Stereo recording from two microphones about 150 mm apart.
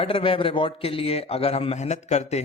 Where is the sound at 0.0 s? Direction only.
35° left (ahead or behind).